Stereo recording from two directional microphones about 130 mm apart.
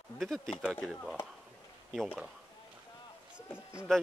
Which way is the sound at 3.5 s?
20° left (ahead or behind).